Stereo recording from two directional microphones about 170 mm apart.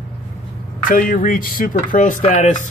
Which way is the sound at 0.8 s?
55° left (ahead or behind).